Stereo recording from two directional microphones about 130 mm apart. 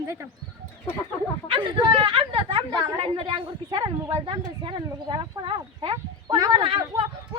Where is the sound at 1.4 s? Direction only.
40° right (ahead or behind).